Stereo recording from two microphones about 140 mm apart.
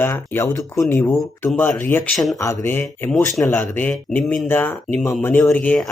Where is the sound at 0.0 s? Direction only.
15° left (ahead or behind).